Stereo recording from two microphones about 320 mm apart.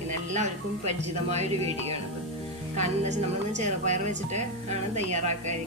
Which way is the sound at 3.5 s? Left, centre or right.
Right.